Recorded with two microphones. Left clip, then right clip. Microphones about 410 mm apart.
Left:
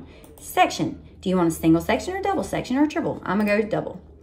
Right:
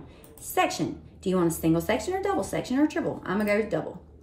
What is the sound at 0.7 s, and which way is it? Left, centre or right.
A woman's voice, centre.